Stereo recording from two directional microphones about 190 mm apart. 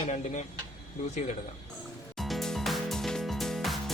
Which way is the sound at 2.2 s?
Centre (ahead or behind).